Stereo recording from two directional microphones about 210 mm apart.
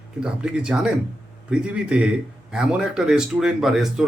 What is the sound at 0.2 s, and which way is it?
Speech, 5° right (ahead or behind).